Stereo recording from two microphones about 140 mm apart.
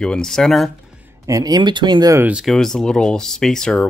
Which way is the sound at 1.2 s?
25° right (ahead or behind).